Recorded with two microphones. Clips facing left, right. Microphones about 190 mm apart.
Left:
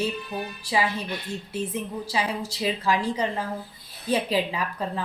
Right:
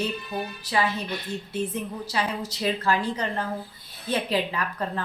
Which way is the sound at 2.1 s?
5° left (ahead or behind).